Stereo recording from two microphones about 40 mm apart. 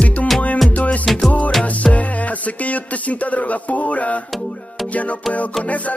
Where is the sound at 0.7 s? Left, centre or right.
Left.